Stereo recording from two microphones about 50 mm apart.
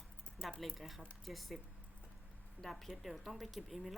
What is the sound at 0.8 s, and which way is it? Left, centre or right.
Speech, centre.